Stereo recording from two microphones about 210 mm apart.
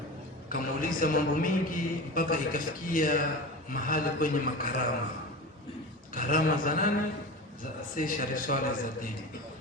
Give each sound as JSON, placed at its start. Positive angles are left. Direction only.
{"t": 0.5, "sound": "a man's voice", "side_deg": 40}
{"t": 6.1, "sound": "a man's voice", "side_deg": 40}